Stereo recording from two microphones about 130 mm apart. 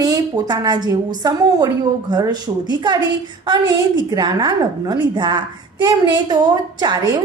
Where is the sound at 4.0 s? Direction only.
35° right (ahead or behind).